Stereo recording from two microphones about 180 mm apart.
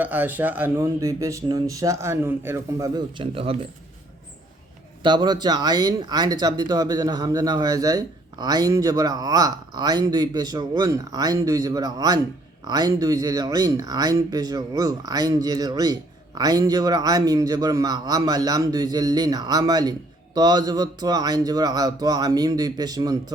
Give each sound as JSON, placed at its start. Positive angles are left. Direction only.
{"t": 0.0, "sound": "speech", "side_deg": -10}
{"t": 5.0, "sound": "speech", "side_deg": -25}